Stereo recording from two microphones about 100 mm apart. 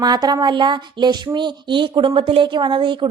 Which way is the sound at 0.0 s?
40° right (ahead or behind).